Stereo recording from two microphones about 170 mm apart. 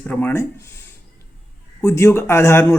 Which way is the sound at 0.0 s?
10° left (ahead or behind).